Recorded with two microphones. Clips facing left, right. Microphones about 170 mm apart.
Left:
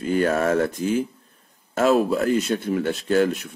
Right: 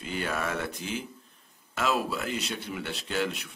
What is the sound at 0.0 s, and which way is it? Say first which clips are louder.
Speech: left 11 dB; 45° left (ahead or behind).